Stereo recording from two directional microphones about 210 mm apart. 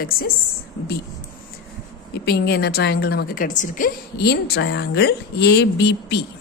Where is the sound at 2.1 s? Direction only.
50° left (ahead or behind).